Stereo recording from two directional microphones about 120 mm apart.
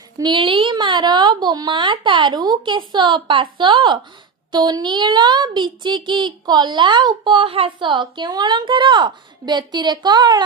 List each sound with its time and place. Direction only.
0.2 s speech: 40° right (ahead or behind)